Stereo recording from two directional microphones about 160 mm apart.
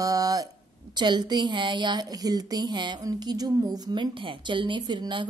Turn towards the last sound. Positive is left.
turn(degrees=-30)  # may be behind; listen again after turning